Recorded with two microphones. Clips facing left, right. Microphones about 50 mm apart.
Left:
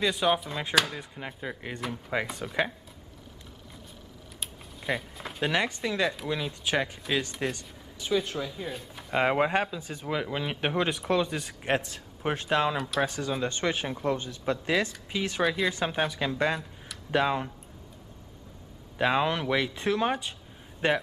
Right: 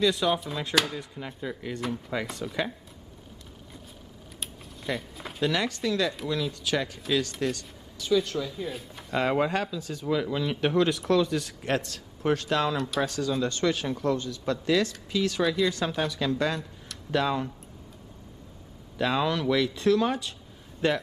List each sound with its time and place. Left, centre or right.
0.0 s speech: centre
5.1 s a sound: centre
5.4 s speech: left; by 8.7 s centre
9.1 s speech: left
12.7 s speech: centre
13.0 s speech: centre
15.4 s speech: centre
15.7 s speech: left
18.9 s speech: left